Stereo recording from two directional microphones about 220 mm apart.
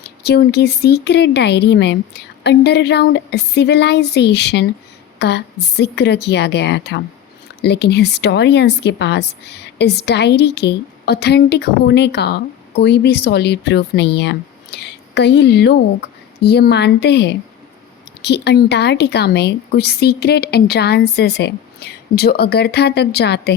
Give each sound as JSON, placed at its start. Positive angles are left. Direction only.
{"t": 0.0, "sound": "speech", "side_deg": 50}